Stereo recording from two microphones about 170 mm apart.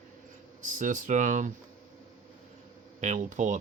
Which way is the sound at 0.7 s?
50° right (ahead or behind).